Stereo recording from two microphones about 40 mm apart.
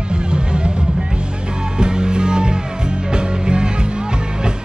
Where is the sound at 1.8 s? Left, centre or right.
Centre.